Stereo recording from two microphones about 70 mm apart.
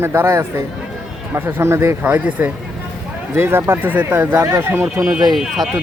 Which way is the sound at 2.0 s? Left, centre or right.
Right.